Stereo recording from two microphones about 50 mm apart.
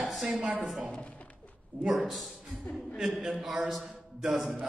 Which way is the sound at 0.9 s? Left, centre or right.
Left.